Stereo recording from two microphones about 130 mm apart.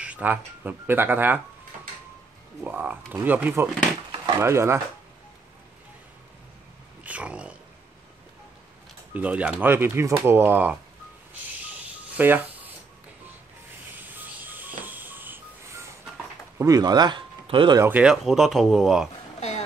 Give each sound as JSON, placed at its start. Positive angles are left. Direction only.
{"t": 0.0, "sound": "speech", "side_deg": -10}
{"t": 2.6, "sound": "speech", "side_deg": -10}
{"t": 7.0, "sound": "speech", "side_deg": -10}
{"t": 9.1, "sound": "speech", "side_deg": -10}
{"t": 11.4, "sound": "a sound", "side_deg": -15}
{"t": 13.9, "sound": "a sound", "side_deg": -15}
{"t": 16.5, "sound": "speech", "side_deg": -30}
{"t": 17.7, "sound": "speech", "side_deg": -15}
{"t": 18.0, "sound": "speech", "side_deg": -5}